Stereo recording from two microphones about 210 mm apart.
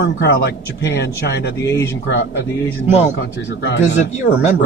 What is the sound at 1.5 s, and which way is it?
Speech, 15° left (ahead or behind).